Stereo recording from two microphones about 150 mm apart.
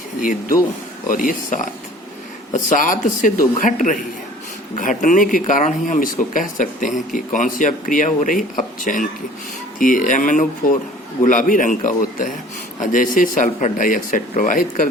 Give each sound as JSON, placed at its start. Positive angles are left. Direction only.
{"t": 0.2, "sound": "speech", "side_deg": 60}